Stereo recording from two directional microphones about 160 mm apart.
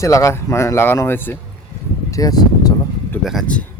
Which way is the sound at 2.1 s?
25° left (ahead or behind).